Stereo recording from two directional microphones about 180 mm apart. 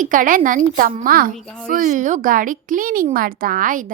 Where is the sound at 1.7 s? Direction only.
45° right (ahead or behind).